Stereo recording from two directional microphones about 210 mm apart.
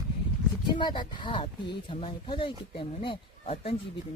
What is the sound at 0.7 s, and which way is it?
Speech, 20° left (ahead or behind).